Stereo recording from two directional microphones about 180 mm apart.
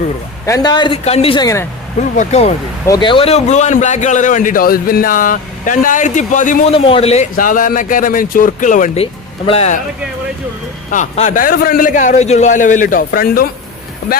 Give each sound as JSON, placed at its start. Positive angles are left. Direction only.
{"t": 0.4, "sound": "speech", "side_deg": 20}
{"t": 2.8, "sound": "a man's voice", "side_deg": 25}
{"t": 6.7, "sound": "speech", "side_deg": 30}
{"t": 7.3, "sound": "a man's voice", "side_deg": 50}
{"t": 10.9, "sound": "a man's voice", "side_deg": 40}